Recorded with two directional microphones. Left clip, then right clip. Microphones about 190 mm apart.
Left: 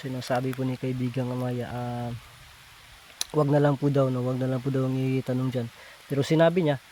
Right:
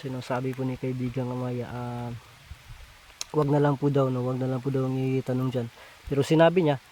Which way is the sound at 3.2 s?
Centre (ahead or behind).